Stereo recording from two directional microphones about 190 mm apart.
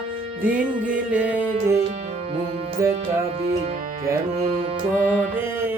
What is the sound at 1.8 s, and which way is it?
Music, 35° right (ahead or behind).